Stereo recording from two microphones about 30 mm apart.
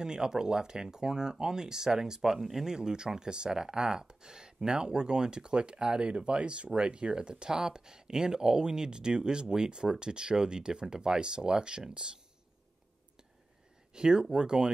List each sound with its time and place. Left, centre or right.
0.0 s speech: right
2.7 s speech: right
13.9 s speech: right